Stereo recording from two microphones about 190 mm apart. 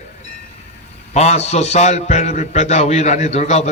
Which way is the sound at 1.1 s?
35° left (ahead or behind).